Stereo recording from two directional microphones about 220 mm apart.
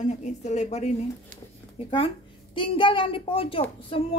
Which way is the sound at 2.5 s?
25° left (ahead or behind).